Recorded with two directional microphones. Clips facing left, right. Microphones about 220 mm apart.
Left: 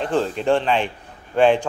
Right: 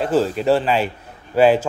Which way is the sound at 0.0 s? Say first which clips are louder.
Right 3 dB; 5° right (ahead or behind).